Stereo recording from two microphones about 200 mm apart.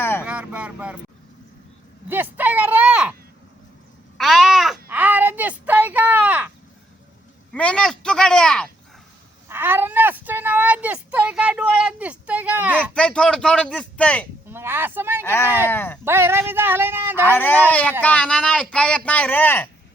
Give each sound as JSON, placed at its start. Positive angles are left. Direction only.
{"t": 0.0, "sound": "vehicle", "side_deg": 10}
{"t": 0.3, "sound": "vehicle", "side_deg": -5}
{"t": 2.0, "sound": "a sound", "side_deg": -10}
{"t": 4.2, "sound": "a sound", "side_deg": 0}
{"t": 7.5, "sound": "speech", "side_deg": 5}
{"t": 9.5, "sound": "a sound", "side_deg": -10}
{"t": 12.9, "sound": "speech", "side_deg": 5}
{"t": 14.5, "sound": "speech", "side_deg": -10}
{"t": 15.2, "sound": "speech", "side_deg": 10}
{"t": 16.0, "sound": "speech", "side_deg": -10}
{"t": 17.2, "sound": "speech", "side_deg": 10}